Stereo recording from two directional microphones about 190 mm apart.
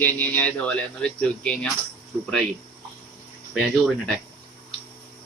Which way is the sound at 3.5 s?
Centre (ahead or behind).